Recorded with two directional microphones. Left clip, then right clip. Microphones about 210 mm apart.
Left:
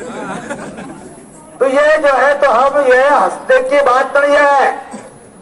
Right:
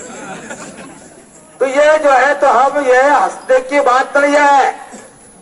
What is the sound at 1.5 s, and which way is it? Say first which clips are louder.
A man's voice: even; 30° right (ahead or behind).